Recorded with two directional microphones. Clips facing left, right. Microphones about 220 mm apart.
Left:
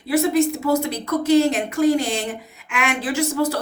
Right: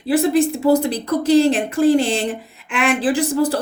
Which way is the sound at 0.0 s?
30° right (ahead or behind).